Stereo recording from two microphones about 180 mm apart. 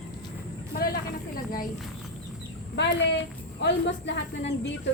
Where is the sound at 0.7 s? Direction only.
55° left (ahead or behind).